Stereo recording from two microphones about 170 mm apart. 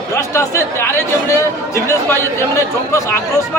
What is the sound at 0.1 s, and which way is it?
Speech, 15° left (ahead or behind).